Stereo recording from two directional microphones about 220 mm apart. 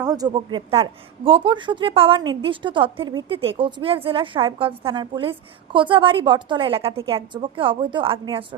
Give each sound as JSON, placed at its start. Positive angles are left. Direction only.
{"t": 0.0, "sound": "speech", "side_deg": -15}